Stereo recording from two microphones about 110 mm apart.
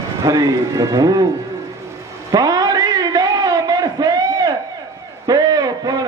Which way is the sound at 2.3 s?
35° right (ahead or behind).